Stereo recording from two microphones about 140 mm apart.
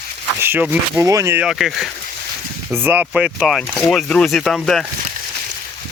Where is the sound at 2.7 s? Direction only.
15° right (ahead or behind).